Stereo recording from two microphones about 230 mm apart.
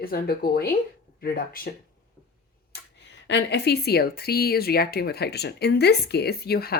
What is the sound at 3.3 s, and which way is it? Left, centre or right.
A woman's voice, left.